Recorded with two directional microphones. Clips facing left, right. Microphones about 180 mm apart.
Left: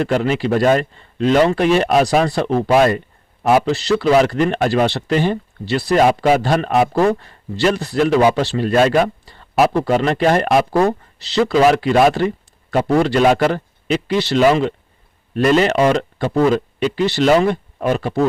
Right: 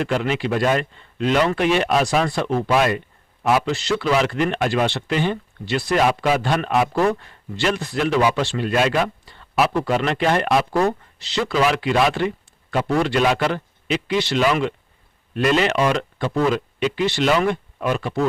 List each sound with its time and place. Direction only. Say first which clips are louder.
0.0 s speech: left 4 dB; 40° left (ahead or behind)